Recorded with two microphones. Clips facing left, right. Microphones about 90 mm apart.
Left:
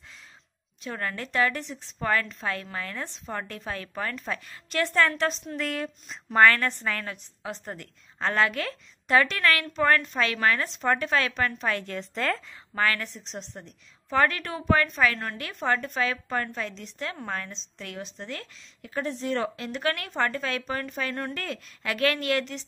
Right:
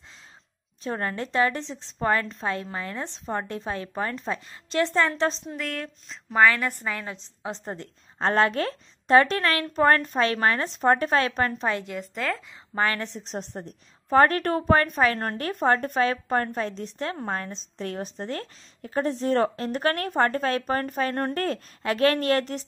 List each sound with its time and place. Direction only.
0.8 s a woman's voice: 30° right (ahead or behind)
5.6 s speech: 5° left (ahead or behind)
6.3 s a woman's voice: 10° right (ahead or behind)
12.7 s a woman's voice: 25° right (ahead or behind)
13.2 s a woman's voice: 45° right (ahead or behind)